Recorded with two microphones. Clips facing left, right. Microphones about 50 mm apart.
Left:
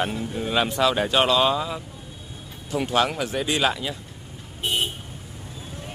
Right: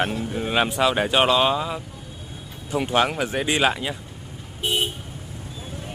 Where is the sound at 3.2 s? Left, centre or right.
Right.